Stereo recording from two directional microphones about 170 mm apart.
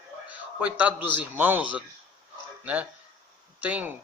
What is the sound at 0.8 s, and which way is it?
Speech, 10° right (ahead or behind).